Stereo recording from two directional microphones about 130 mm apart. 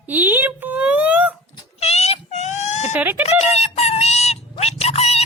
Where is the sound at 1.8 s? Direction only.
50° left (ahead or behind).